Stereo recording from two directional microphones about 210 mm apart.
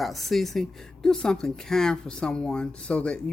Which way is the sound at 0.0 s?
Centre (ahead or behind).